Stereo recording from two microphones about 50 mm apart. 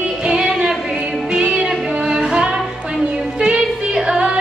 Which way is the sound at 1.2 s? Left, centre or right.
Right.